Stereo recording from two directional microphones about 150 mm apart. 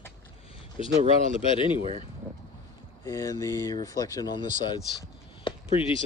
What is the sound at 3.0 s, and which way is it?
Speech, 20° left (ahead or behind).